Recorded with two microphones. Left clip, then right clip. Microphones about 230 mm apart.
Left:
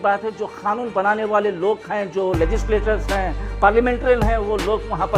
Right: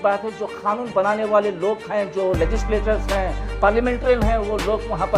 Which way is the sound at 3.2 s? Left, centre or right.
Left.